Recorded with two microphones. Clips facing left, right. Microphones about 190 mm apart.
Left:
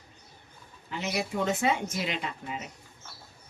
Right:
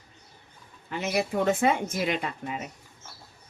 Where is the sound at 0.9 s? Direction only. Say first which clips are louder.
Right 4 dB; 55° right (ahead or behind).